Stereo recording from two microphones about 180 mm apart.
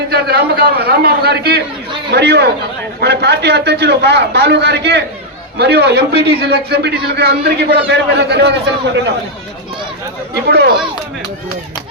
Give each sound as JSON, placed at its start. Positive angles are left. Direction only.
{"t": 0.1, "sound": "a man's voice", "side_deg": -60}
{"t": 10.3, "sound": "a man's voice", "side_deg": -65}